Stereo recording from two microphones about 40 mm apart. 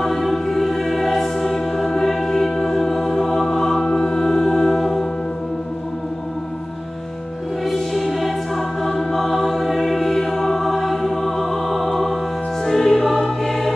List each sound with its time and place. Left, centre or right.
0.0 s music: centre
7.6 s music: centre